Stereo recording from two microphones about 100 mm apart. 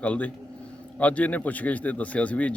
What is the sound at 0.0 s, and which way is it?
A man's voice, 15° left (ahead or behind).